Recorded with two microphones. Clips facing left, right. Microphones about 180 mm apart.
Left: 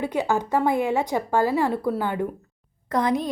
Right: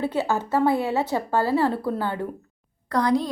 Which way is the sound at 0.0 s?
15° left (ahead or behind).